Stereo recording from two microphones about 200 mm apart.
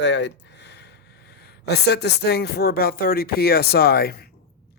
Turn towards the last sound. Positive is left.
turn(degrees=50)  # may be behind; listen again after turning